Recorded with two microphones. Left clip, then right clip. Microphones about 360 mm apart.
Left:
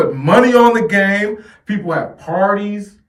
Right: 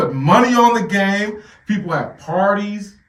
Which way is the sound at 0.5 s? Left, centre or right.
Left.